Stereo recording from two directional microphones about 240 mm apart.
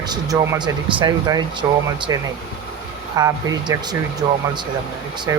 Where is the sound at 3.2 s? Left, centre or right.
Centre.